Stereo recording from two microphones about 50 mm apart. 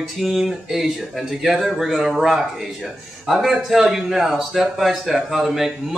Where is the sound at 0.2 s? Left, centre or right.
Centre.